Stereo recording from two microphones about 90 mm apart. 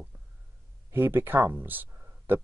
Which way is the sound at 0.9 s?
25° right (ahead or behind).